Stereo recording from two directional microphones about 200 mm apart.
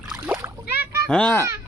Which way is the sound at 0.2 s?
15° right (ahead or behind).